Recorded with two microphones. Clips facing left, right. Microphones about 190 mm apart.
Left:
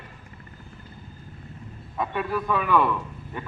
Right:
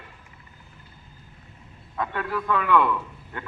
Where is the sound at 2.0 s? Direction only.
15° left (ahead or behind).